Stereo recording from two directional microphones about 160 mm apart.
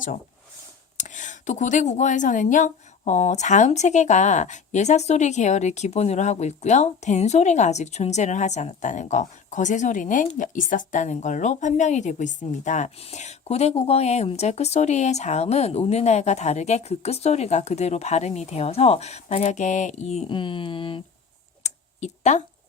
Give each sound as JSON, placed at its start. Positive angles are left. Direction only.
{"t": 0.9, "sound": "speech", "side_deg": 50}
{"t": 20.2, "sound": "speech", "side_deg": 30}
{"t": 21.6, "sound": "a sound", "side_deg": 45}